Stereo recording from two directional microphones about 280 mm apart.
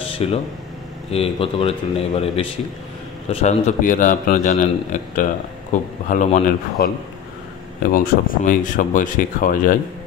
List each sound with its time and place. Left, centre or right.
0.2 s a man's voice: left
7.9 s a man's voice: left